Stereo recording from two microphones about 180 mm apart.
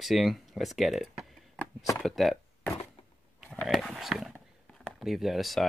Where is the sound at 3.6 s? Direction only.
Centre (ahead or behind).